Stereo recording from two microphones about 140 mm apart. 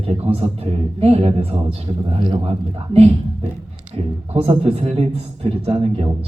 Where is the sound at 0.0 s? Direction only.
45° right (ahead or behind).